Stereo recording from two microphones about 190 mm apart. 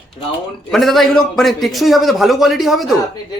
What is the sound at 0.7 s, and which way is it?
Speech, centre (ahead or behind).